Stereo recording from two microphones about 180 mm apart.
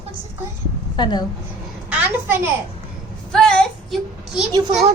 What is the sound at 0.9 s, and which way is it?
Speech, 25° left (ahead or behind).